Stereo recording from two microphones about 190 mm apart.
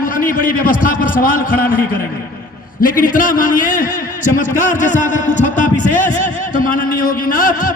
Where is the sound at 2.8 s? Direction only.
45° left (ahead or behind).